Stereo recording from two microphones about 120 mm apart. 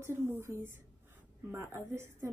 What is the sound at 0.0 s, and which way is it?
A woman's voice, 20° right (ahead or behind).